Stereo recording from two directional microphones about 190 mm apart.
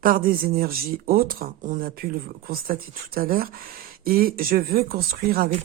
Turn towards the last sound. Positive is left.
turn(degrees=-50)  # may be behind; listen again after turning